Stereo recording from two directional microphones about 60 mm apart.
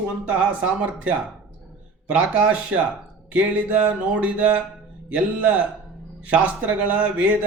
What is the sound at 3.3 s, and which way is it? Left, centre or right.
Mantra, right.